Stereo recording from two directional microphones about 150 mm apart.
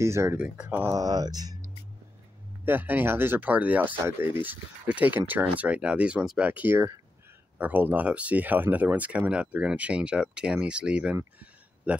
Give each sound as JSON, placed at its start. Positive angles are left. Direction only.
{"t": 0.0, "sound": "speech", "side_deg": -20}
{"t": 0.8, "sound": "speech", "side_deg": -25}
{"t": 2.6, "sound": "a man's voice", "side_deg": -15}